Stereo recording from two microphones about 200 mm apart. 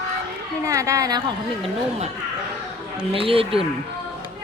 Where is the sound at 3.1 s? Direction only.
25° right (ahead or behind).